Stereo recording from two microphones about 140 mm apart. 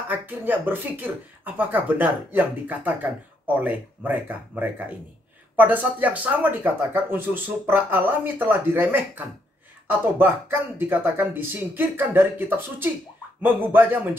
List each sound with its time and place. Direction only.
0.1 s speech: 15° right (ahead or behind)